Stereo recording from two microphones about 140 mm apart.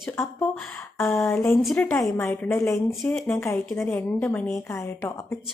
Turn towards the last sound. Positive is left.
turn(degrees=15)  # may be behind; listen again after turning